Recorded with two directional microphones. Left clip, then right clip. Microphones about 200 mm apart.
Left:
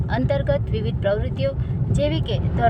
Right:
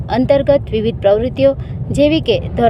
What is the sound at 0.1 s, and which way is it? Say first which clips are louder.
Speech: right 11 dB; 30° right (ahead or behind).